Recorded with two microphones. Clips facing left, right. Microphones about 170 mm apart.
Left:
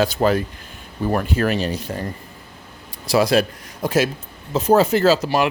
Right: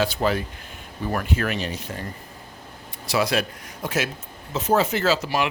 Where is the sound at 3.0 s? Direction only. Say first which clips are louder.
Left 6 dB; 35° left (ahead or behind).